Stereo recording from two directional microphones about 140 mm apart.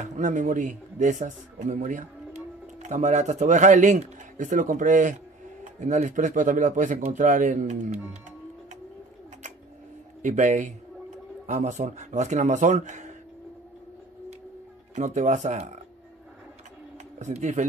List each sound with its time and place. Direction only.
0.0 s speech: 65° right (ahead or behind)
10.2 s speech: 60° right (ahead or behind)
15.0 s speech: 60° right (ahead or behind)
17.2 s speech: 60° right (ahead or behind)